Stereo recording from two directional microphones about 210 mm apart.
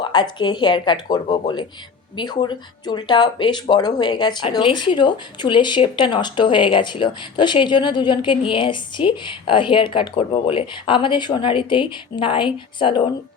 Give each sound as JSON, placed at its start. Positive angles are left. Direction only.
{"t": 0.0, "sound": "speech", "side_deg": 20}